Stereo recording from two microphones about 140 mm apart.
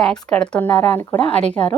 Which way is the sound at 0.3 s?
5° left (ahead or behind).